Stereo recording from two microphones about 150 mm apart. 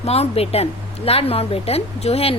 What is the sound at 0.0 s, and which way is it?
A woman's voice, 45° left (ahead or behind).